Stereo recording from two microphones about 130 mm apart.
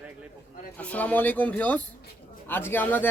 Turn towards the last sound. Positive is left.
turn(degrees=15)  # may be behind; listen again after turning